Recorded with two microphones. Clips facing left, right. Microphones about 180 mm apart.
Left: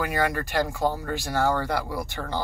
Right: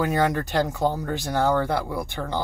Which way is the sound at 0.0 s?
20° right (ahead or behind).